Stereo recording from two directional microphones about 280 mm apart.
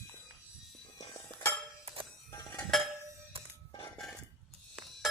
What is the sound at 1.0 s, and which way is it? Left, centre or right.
Music, centre.